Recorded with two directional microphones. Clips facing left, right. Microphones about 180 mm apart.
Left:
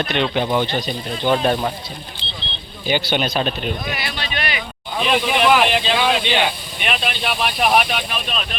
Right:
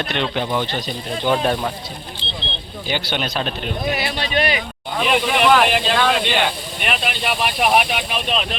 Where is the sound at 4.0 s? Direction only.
35° right (ahead or behind).